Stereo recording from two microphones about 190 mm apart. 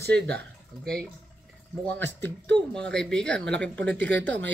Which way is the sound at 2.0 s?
65° right (ahead or behind).